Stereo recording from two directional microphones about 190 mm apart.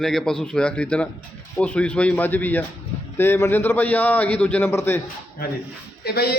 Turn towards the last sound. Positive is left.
turn(degrees=55)  # may be behind; listen again after turning